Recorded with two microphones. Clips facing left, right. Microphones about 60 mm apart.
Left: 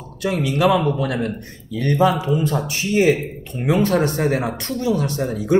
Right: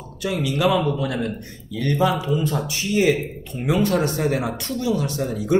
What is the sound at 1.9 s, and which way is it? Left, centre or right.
A man's voice, left.